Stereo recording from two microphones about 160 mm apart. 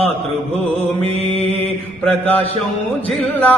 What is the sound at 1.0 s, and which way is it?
Mantra, 40° right (ahead or behind).